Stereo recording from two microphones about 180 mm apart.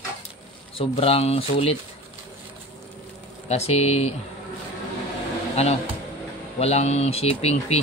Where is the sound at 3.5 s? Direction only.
35° left (ahead or behind).